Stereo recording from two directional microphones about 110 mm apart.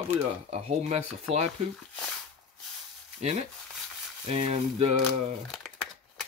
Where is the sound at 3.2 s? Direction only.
70° right (ahead or behind).